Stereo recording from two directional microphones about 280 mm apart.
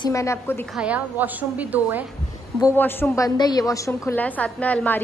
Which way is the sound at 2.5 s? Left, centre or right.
Centre.